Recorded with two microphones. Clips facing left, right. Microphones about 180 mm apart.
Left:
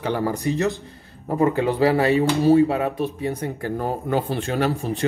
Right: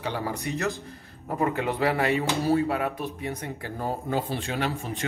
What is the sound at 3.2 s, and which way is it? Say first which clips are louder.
Speech: left 7 dB; 35° left (ahead or behind).